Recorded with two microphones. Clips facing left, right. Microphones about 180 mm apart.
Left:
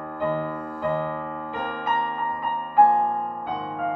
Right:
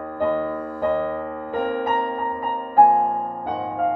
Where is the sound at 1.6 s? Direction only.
45° right (ahead or behind).